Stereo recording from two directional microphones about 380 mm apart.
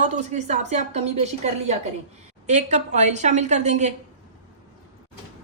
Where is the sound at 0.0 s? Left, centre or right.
Centre.